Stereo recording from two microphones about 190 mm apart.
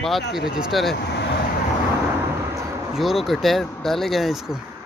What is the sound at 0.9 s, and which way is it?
Vehicle, 60° left (ahead or behind).